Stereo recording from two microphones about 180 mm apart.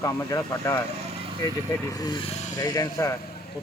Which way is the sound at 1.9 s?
20° left (ahead or behind).